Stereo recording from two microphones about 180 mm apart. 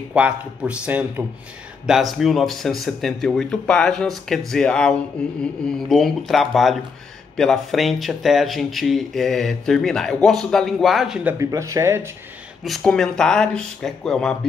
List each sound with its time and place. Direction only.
0.1 s speech: 5° right (ahead or behind)
11.3 s speech: 15° right (ahead or behind)
12.6 s speech: centre (ahead or behind)